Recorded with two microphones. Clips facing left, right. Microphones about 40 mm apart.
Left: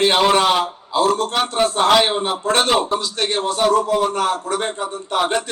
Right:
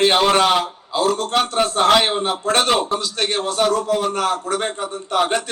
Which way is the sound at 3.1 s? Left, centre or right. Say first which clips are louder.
Even; right.